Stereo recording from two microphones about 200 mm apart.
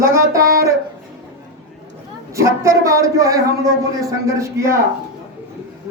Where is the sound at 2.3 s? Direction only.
15° right (ahead or behind).